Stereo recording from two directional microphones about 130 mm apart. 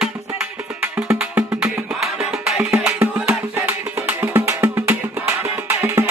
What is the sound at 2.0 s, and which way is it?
Music, 5° right (ahead or behind).